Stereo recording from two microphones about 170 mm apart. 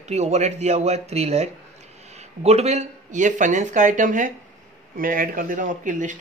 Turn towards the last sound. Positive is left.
turn(degrees=-50)  # may be behind; listen again after turning